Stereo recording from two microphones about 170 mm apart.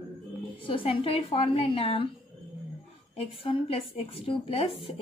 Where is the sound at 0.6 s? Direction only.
30° left (ahead or behind).